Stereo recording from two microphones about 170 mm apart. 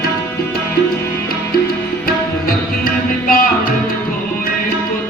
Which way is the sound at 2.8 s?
55° left (ahead or behind).